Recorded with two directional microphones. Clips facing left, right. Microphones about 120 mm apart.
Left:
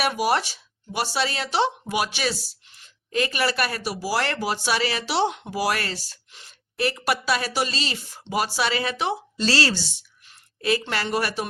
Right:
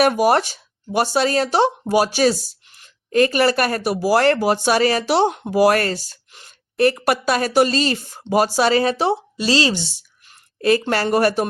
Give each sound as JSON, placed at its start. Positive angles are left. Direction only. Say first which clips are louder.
{"t": 0.0, "sound": "speech", "louder": "right 7 dB", "side_deg": -45}
{"t": 9.4, "sound": "a woman's voice", "louder": "right 3 dB", "side_deg": -15}
{"t": 10.2, "sound": "speech", "louder": "right 7 dB", "side_deg": -45}